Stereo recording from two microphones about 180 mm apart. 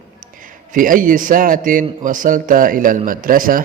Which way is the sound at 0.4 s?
50° right (ahead or behind).